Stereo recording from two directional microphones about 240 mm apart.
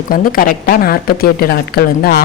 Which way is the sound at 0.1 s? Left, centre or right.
Left.